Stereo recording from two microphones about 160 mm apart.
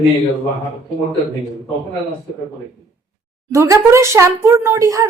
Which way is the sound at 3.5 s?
20° right (ahead or behind).